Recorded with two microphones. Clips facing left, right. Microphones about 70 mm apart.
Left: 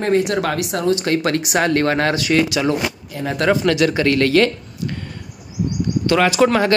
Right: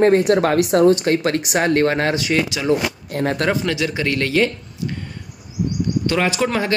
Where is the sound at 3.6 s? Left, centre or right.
Left.